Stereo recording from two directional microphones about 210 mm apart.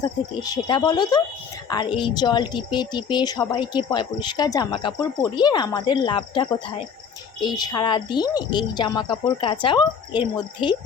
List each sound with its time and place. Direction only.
0.0 s speech: 20° left (ahead or behind)